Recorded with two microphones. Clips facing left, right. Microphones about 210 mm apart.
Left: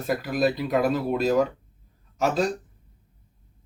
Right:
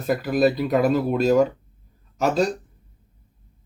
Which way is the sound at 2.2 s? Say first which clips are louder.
Right 3 dB; centre (ahead or behind).